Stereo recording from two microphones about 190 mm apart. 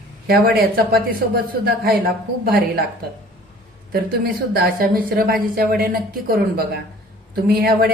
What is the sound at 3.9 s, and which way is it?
A man's voice, 55° right (ahead or behind).